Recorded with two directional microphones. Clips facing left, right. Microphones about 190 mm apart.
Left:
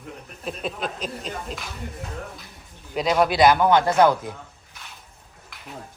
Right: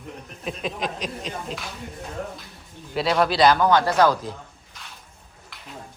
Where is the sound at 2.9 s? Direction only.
Centre (ahead or behind).